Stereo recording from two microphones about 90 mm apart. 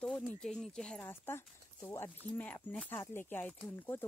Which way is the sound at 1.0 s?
25° left (ahead or behind).